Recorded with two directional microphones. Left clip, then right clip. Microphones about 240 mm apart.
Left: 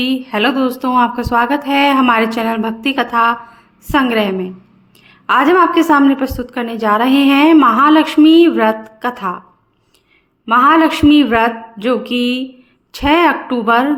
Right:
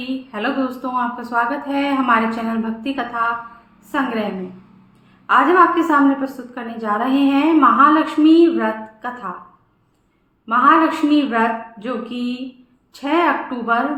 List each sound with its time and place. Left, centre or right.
0.0 s a woman's voice: left
10.4 s a woman's voice: left